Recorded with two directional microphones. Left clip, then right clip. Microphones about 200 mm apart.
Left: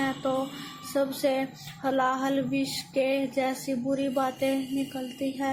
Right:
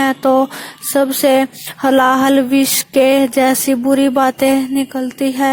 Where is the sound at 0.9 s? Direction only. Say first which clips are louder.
Right 14 dB; 50° right (ahead or behind).